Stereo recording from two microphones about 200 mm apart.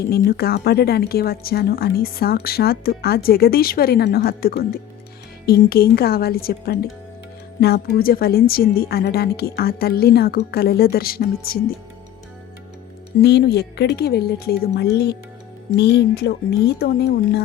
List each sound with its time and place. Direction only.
0.1 s speech: 50° left (ahead or behind)
13.2 s speech: 55° left (ahead or behind)